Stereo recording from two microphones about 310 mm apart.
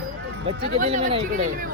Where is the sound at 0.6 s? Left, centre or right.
Right.